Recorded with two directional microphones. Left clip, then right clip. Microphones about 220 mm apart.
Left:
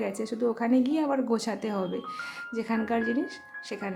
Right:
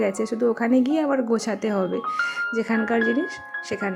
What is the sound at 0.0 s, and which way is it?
A woman's voice, 20° right (ahead or behind).